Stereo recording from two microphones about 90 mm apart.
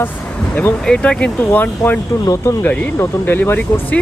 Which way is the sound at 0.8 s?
10° left (ahead or behind).